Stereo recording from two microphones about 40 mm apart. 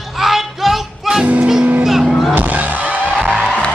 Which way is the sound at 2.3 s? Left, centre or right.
Right.